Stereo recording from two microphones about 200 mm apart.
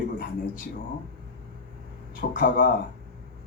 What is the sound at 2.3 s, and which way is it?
Speech, 45° left (ahead or behind).